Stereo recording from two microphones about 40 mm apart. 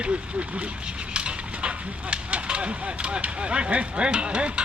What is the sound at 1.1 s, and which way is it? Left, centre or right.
Speech, right.